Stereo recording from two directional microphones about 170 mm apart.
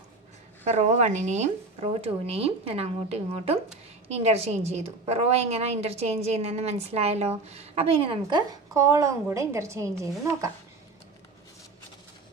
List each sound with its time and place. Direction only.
0.6 s a woman's voice: 40° right (ahead or behind); by 10.5 s 15° right (ahead or behind)